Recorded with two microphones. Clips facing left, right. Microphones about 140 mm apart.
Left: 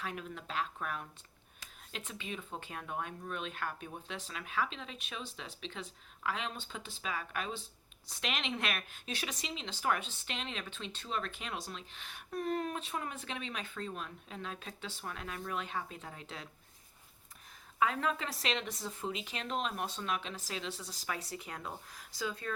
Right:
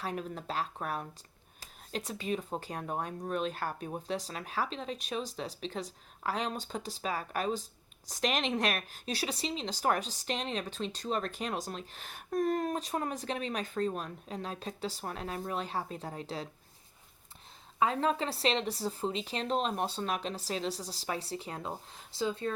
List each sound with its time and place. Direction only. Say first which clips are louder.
0.0 s speech: right 5 dB; 35° right (ahead or behind)
17.7 s speech: right 4 dB; 30° right (ahead or behind)